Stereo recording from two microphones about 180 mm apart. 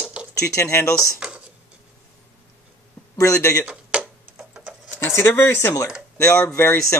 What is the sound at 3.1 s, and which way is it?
Speech, 15° left (ahead or behind).